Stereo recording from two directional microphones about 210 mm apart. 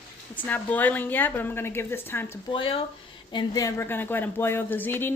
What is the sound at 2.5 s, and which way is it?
A woman's voice, 25° left (ahead or behind).